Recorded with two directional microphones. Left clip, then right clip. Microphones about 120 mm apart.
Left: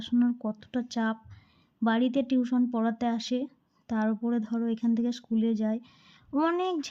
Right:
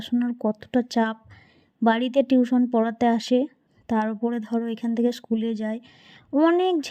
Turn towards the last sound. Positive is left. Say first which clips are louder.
# right 8 dB
turn(degrees=-45)  # may be behind; listen again after turning